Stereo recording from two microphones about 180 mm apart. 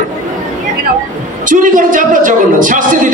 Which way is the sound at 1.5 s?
45° right (ahead or behind).